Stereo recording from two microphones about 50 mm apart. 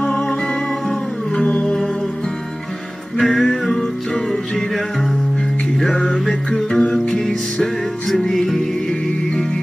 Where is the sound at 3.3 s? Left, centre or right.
Centre.